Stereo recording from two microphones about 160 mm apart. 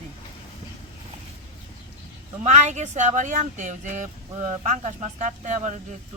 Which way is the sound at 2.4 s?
45° right (ahead or behind).